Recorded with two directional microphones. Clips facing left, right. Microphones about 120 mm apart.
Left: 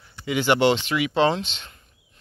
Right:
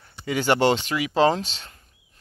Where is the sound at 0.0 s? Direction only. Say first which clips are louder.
Left 1 dB; 40° right (ahead or behind).